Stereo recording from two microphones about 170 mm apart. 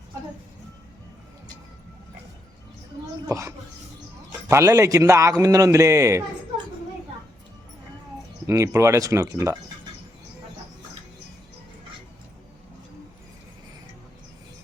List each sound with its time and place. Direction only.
3.2 s a man's voice: 15° right (ahead or behind)
8.4 s a man's voice: 15° right (ahead or behind)